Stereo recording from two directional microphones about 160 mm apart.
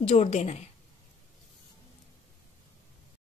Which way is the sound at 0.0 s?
40° left (ahead or behind).